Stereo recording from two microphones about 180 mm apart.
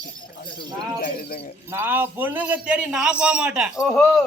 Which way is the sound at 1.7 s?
10° right (ahead or behind).